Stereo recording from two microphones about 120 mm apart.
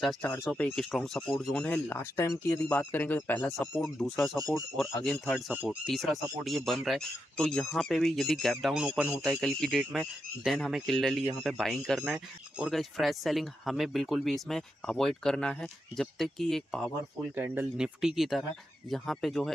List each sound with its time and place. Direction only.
0.0 s speech: centre (ahead or behind)
1.9 s speech: 20° left (ahead or behind)
3.8 s speech: centre (ahead or behind)
8.8 s speech: 10° right (ahead or behind)
9.2 s speech: centre (ahead or behind)